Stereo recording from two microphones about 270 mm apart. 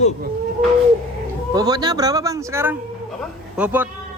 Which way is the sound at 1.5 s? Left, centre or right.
Centre.